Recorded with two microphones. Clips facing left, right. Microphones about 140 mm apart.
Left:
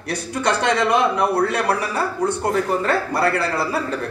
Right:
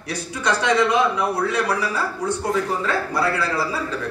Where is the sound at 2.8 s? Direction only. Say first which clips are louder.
Left 3 dB; 60° left (ahead or behind).